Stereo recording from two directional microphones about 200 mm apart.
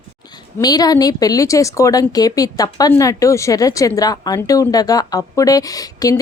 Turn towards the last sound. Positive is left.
turn(degrees=15)  # may be behind; listen again after turning